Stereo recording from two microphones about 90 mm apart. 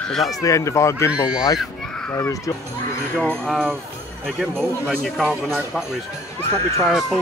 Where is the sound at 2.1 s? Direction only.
40° left (ahead or behind).